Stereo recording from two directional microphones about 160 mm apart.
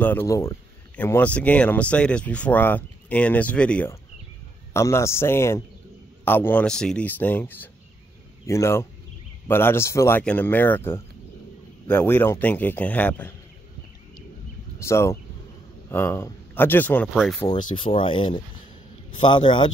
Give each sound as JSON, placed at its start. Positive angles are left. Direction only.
{"t": 0.0, "sound": "speech", "side_deg": 15}
{"t": 14.8, "sound": "speech", "side_deg": 15}
{"t": 17.1, "sound": "speech", "side_deg": 0}
{"t": 17.5, "sound": "speech", "side_deg": 30}